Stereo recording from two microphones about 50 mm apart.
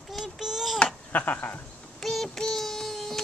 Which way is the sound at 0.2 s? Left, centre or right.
Centre.